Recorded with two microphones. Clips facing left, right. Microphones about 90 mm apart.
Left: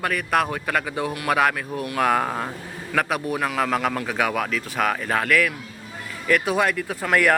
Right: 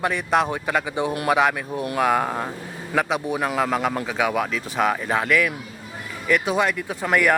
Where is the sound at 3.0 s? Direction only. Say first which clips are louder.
Right 1 dB; 20° right (ahead or behind).